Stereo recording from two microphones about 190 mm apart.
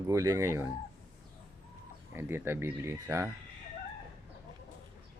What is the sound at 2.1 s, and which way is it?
Speech, 10° right (ahead or behind).